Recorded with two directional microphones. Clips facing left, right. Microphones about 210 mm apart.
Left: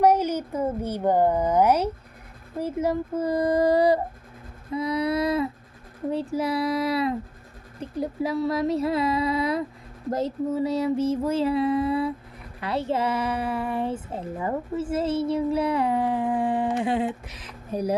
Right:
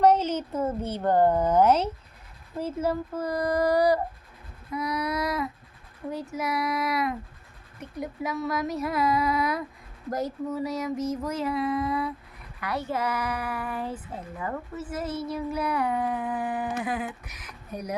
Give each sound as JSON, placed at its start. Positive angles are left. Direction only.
{"t": 0.0, "sound": "a woman's voice", "side_deg": 10}